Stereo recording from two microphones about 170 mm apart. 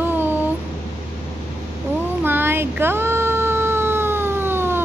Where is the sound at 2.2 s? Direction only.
10° right (ahead or behind).